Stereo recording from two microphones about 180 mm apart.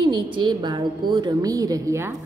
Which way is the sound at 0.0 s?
25° right (ahead or behind).